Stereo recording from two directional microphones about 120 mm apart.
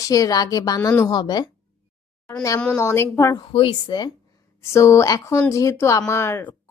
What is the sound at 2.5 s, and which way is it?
Speech, 10° left (ahead or behind).